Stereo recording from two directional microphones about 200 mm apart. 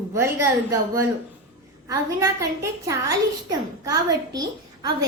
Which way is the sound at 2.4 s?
15° right (ahead or behind).